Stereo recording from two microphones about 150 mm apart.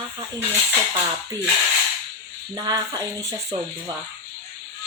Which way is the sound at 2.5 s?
25° right (ahead or behind).